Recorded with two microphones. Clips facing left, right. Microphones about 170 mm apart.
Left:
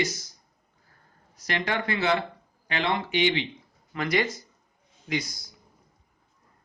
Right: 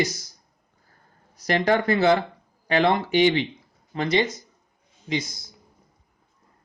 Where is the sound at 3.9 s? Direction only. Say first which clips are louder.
Right 4 dB; 25° right (ahead or behind).